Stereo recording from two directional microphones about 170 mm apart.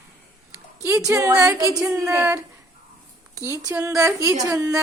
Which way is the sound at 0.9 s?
15° right (ahead or behind).